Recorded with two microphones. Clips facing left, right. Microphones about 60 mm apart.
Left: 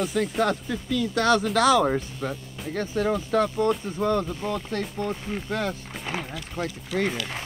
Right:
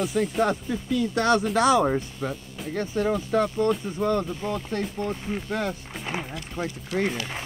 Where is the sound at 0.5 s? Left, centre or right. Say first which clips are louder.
Even; right.